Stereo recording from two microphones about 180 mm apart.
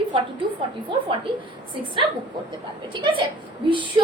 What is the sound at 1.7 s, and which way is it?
Speech, 25° right (ahead or behind).